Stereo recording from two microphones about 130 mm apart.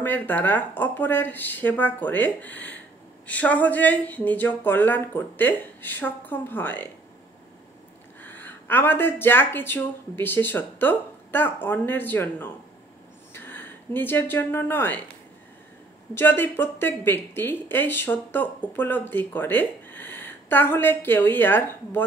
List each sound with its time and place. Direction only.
0.0 s speech: 15° left (ahead or behind)
8.2 s speech: 15° left (ahead or behind)
16.2 s speech: 15° left (ahead or behind)